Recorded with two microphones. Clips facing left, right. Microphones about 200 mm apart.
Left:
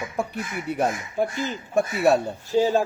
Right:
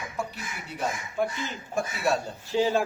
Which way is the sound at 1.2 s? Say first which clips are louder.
Left 4 dB; 35° left (ahead or behind).